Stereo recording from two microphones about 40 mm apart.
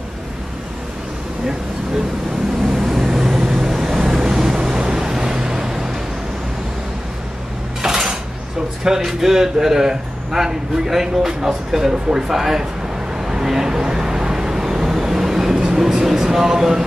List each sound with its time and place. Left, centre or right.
2.6 s vehicle: centre
7.8 s dishes: centre
8.8 s speech: centre
13.2 s vehicle: centre